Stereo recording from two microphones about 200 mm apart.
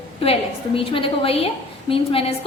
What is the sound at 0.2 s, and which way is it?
A woman's voice, 25° left (ahead or behind).